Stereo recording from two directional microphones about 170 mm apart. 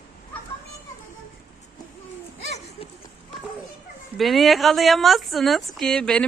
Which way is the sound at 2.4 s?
40° left (ahead or behind).